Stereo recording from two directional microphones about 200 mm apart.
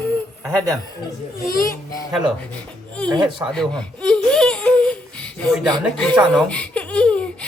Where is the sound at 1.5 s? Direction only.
45° left (ahead or behind).